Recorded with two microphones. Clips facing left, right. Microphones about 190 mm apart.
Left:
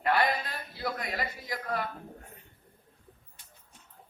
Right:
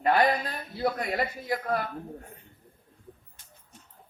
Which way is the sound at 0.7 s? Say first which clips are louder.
Right 7 dB; 45° right (ahead or behind).